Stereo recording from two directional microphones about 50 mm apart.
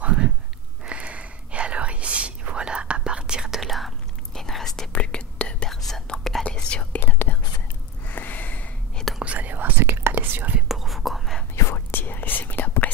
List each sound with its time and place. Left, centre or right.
0.8 s whispering: right; by 4.8 s centre
4.9 s whispering: left
5.7 s whispering: centre
6.4 s whispering: left
7.0 s whispering: left
8.1 s snort: left
9.2 s whispering: right
9.8 s whispering: right
10.7 s whispering: centre
11.5 s whispering: left
11.9 s whispering: left